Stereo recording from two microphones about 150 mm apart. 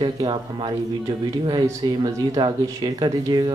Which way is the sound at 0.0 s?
30° right (ahead or behind).